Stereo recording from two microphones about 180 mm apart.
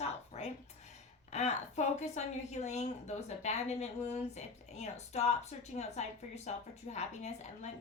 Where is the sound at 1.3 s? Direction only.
40° left (ahead or behind).